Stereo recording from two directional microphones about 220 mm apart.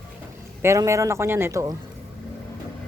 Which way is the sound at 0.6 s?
15° right (ahead or behind).